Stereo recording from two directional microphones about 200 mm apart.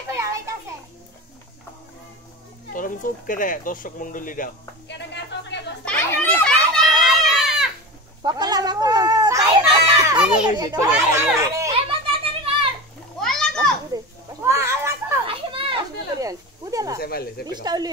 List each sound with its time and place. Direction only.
0.1 s children playing: 15° right (ahead or behind)
2.7 s speech: 40° left (ahead or behind)
4.8 s music: 60° left (ahead or behind)
5.9 s children playing: 5° left (ahead or behind)
8.2 s cat: 20° right (ahead or behind)
10.9 s speech: 10° right (ahead or behind)
11.9 s children playing: 25° right (ahead or behind)
13.2 s children playing: centre (ahead or behind)
13.9 s children playing: 15° right (ahead or behind)
15.2 s children playing: 25° right (ahead or behind)
17.0 s speech: 50° left (ahead or behind)
17.5 s speech: 20° right (ahead or behind)